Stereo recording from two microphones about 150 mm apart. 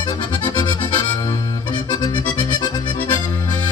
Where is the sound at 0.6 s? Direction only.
30° left (ahead or behind).